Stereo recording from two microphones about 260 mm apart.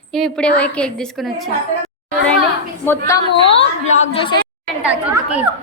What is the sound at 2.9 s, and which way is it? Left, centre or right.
A woman's voice, centre.